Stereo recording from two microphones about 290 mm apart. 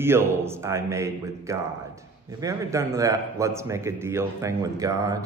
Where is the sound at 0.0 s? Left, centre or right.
Centre.